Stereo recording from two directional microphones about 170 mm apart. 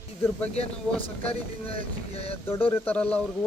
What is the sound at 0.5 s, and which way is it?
Speech, 35° left (ahead or behind).